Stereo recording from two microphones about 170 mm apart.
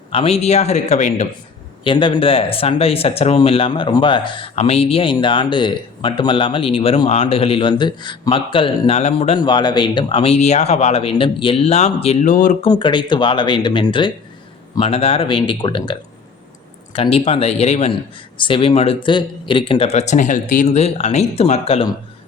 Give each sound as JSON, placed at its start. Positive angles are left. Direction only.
{"t": 0.1, "sound": "speech", "side_deg": 35}
{"t": 1.8, "sound": "speech", "side_deg": 30}
{"t": 12.6, "sound": "speech", "side_deg": 25}